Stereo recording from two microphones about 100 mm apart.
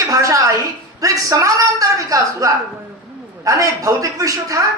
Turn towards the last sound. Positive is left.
turn(degrees=-35)  # may be behind; listen again after turning